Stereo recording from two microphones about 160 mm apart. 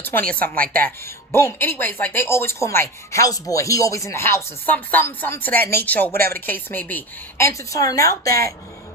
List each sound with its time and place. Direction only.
0.0 s speech: 10° left (ahead or behind)
0.5 s speech: 65° right (ahead or behind)
1.3 s speech: 15° left (ahead or behind)